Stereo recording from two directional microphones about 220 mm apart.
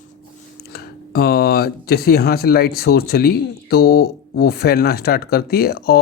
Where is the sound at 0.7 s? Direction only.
45° left (ahead or behind).